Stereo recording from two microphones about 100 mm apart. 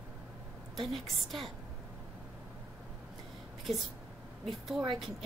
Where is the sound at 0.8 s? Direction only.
Centre (ahead or behind).